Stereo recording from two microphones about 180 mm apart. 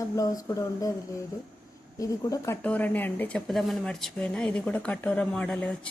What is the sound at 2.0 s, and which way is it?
Speech, 15° left (ahead or behind).